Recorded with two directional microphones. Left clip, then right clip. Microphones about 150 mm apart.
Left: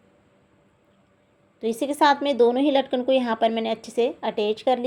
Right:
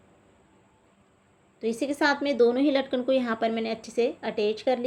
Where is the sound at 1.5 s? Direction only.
35° left (ahead or behind).